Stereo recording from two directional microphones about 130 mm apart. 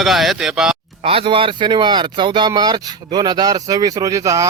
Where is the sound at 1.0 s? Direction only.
45° right (ahead or behind); by 4.5 s 25° right (ahead or behind).